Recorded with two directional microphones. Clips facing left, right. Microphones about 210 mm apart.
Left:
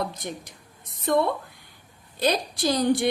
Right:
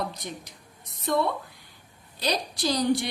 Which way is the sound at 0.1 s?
55° left (ahead or behind).